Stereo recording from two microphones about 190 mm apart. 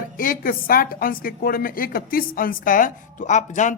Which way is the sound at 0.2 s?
50° left (ahead or behind).